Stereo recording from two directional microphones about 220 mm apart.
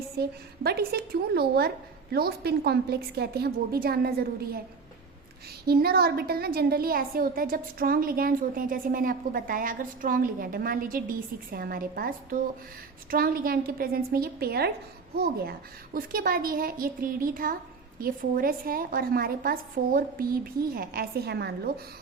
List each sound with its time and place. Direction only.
0.2 s a woman's voice: 45° right (ahead or behind)
5.6 s a woman's voice: 45° right (ahead or behind)